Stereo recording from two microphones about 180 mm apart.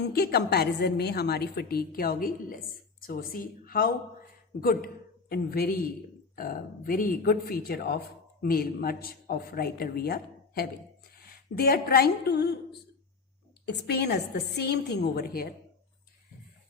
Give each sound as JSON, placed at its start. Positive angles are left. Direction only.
{"t": 0.0, "sound": "a woman's voice", "side_deg": 60}
{"t": 13.7, "sound": "a woman's voice", "side_deg": 65}